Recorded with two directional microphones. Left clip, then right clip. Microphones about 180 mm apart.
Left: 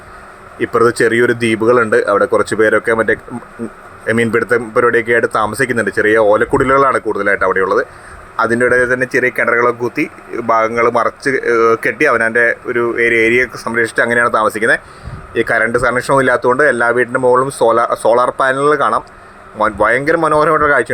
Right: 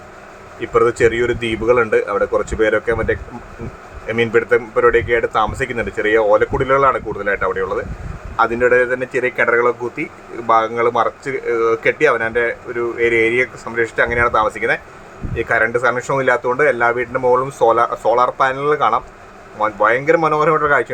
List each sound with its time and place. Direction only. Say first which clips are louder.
0.6 s speech: left 2 dB; 30° left (ahead or behind)